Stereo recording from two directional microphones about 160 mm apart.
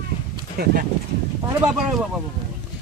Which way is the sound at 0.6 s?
80° right.